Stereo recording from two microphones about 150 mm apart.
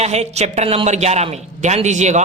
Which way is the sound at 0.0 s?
45° right (ahead or behind).